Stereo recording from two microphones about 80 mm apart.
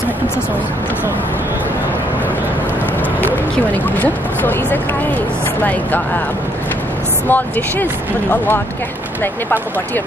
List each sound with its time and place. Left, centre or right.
4.0 s speech: left
7.2 s speech: left